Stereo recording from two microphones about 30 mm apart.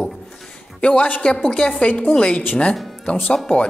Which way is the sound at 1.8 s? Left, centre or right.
Left.